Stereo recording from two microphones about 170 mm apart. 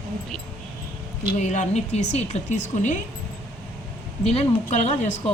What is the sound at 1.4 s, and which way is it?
Speech, 45° left (ahead or behind).